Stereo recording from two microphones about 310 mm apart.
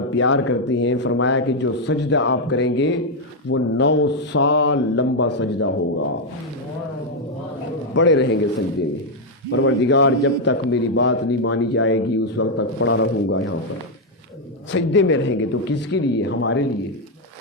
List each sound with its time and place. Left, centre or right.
0.1 s a man's voice: left
7.9 s a man's voice: left
9.5 s a man's voice: left
14.7 s a man's voice: left